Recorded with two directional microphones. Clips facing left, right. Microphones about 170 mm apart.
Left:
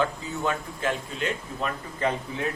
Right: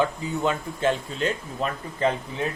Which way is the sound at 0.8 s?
30° right (ahead or behind).